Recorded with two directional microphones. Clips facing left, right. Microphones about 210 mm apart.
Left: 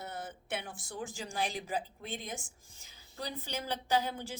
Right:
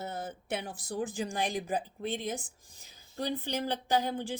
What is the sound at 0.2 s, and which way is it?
Speech, 40° right (ahead or behind).